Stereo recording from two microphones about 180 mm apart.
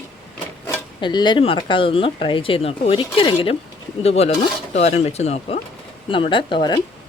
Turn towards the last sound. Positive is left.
turn(degrees=25)  # may be behind; listen again after turning